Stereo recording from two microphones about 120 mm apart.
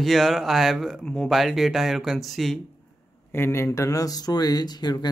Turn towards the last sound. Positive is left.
turn(degrees=35)  # may be behind; listen again after turning